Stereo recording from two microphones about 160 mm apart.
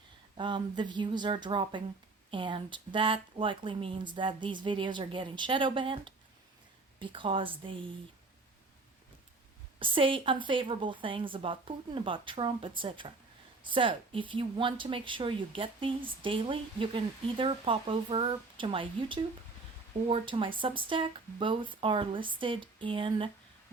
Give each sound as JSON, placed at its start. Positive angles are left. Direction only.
{"t": 0.3, "sound": "speech", "side_deg": -30}
{"t": 9.7, "sound": "speech", "side_deg": -35}